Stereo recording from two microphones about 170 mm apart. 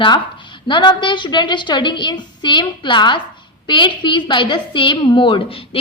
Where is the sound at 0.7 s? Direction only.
25° left (ahead or behind).